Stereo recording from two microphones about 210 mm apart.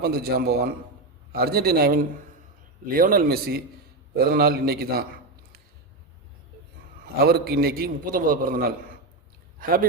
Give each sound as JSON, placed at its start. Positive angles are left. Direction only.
{"t": 0.0, "sound": "a man's voice", "side_deg": -50}
{"t": 7.2, "sound": "a man's voice", "side_deg": -45}